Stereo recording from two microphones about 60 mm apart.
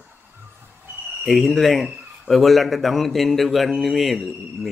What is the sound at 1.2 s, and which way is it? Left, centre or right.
Speech, centre.